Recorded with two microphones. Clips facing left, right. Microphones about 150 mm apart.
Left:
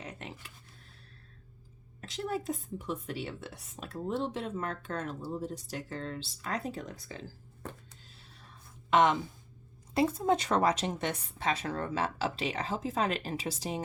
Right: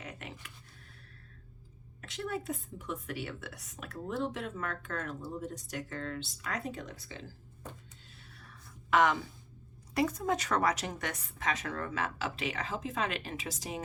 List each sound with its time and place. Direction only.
0.0 s a sound: 30° left (ahead or behind)
2.0 s a woman's voice: 30° left (ahead or behind)
8.9 s a woman's voice: 25° left (ahead or behind)